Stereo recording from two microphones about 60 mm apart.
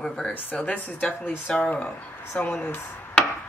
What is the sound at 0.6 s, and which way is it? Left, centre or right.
Speech, centre.